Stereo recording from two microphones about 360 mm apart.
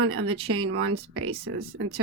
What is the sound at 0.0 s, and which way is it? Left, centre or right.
Speech, right.